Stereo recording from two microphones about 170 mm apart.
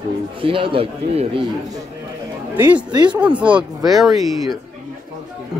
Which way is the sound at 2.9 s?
25° right (ahead or behind).